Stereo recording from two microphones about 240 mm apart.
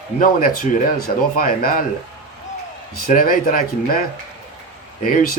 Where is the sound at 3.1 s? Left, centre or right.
Left.